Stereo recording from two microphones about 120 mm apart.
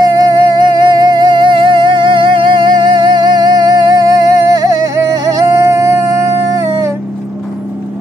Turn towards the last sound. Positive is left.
turn(degrees=-25)  # may be behind; listen again after turning